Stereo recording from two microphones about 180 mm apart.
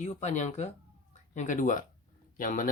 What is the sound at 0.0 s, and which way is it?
Speech, 40° left (ahead or behind).